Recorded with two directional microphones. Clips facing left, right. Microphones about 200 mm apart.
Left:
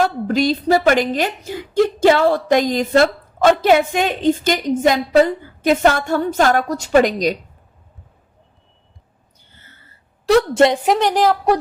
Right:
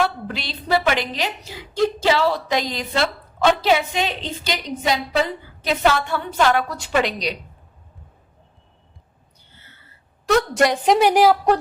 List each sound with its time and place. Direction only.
0.0 s a woman's voice: 45° left (ahead or behind)
10.2 s a woman's voice: 30° left (ahead or behind)
10.8 s a woman's voice: 5° right (ahead or behind)